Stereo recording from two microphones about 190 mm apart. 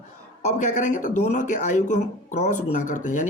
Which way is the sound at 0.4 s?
40° left (ahead or behind).